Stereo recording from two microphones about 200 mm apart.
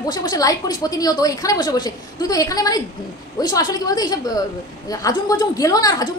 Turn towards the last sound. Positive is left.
turn(degrees=20)  # may be behind; listen again after turning